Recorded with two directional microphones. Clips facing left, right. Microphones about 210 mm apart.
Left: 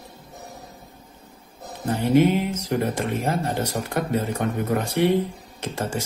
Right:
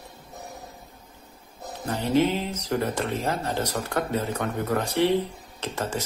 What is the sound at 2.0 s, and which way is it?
Speech, 10° left (ahead or behind).